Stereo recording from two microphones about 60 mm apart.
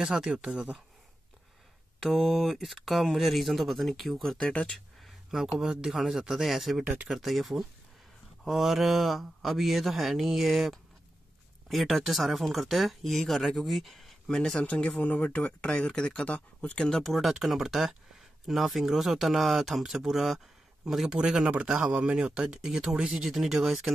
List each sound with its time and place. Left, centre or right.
0.0 s speech: centre
2.0 s speech: centre
5.0 s a sound: centre
5.6 s speech: centre; by 16.8 s left
16.8 s speech: centre